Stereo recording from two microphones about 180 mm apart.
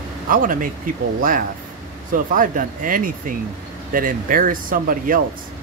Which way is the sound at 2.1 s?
50° right (ahead or behind).